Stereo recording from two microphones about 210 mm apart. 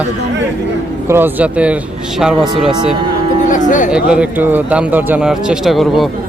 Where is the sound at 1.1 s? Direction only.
10° right (ahead or behind).